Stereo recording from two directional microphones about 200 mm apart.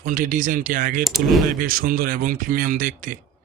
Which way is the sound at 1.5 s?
45° right (ahead or behind).